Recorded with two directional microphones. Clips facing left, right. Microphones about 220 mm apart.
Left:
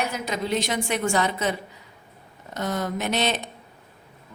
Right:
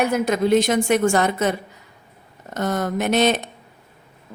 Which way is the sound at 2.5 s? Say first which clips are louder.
Right 5 dB; 50° right (ahead or behind).